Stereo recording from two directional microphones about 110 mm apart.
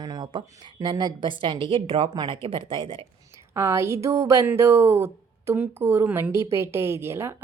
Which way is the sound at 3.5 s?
25° right (ahead or behind).